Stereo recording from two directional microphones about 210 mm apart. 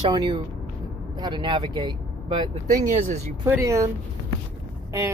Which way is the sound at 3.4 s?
10° right (ahead or behind).